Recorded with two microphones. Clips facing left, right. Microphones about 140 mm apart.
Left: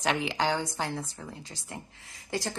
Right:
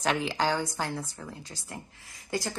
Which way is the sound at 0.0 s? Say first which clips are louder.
Right 1 dB; 20° left (ahead or behind).